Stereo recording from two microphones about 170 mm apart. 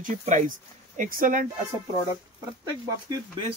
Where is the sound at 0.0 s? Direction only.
45° right (ahead or behind).